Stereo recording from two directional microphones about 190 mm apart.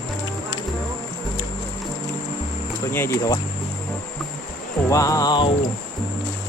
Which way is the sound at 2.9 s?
15° left (ahead or behind).